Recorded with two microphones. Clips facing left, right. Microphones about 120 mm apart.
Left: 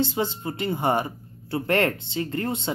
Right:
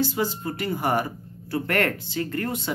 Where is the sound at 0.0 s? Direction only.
25° left (ahead or behind).